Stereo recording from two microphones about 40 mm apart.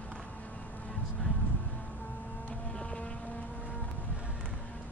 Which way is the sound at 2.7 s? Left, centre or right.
Left.